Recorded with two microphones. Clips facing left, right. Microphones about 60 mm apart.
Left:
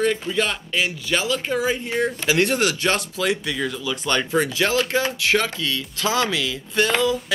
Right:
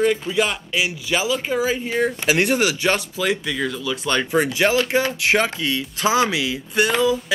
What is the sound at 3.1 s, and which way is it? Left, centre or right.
Speech, centre.